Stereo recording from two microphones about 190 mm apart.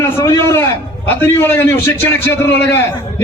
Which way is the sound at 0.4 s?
10° left (ahead or behind).